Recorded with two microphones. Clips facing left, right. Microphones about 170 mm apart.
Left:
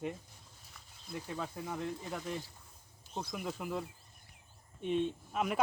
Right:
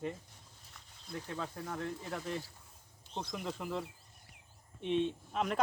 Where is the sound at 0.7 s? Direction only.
10° left (ahead or behind).